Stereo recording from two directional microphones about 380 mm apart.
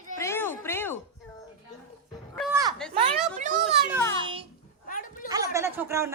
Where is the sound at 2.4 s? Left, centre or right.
Centre.